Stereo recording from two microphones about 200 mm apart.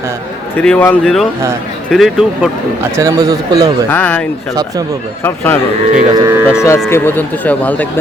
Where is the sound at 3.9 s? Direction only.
10° left (ahead or behind).